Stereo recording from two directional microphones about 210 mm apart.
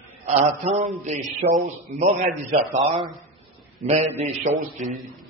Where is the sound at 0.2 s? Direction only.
30° right (ahead or behind).